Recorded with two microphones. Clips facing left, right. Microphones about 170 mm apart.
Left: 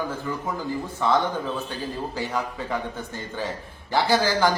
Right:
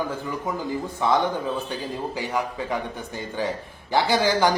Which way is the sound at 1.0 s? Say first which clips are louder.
Right 1 dB; 15° right (ahead or behind).